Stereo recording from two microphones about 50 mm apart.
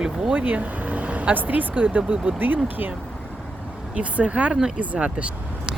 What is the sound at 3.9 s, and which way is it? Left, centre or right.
Speech, right.